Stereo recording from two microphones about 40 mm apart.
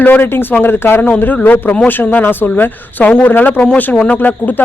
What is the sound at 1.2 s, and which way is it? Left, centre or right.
Speech, left.